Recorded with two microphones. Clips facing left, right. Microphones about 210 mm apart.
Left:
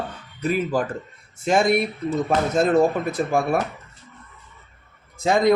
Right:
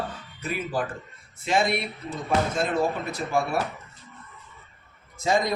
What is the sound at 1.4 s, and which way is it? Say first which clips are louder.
Speech: left 6 dB; 50° left (ahead or behind).